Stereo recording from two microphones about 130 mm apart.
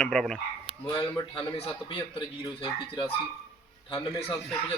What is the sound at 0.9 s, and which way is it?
Speech, 35° left (ahead or behind).